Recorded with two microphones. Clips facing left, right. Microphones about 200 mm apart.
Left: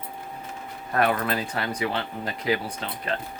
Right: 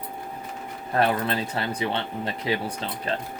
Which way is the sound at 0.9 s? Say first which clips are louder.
Right 1 dB; 30° right (ahead or behind).